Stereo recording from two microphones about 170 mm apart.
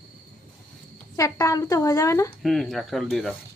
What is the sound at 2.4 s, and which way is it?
Speech, centre (ahead or behind).